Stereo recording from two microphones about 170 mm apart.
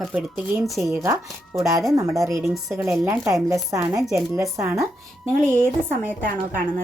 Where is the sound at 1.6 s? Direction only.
20° right (ahead or behind).